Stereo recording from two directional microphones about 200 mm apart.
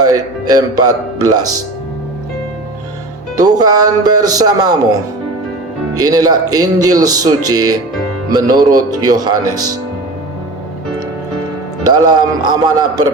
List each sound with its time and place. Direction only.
0.0 s speech: 20° right (ahead or behind)
3.3 s speech: 20° right (ahead or behind)
6.0 s speech: 20° right (ahead or behind)
11.8 s speech: 20° right (ahead or behind)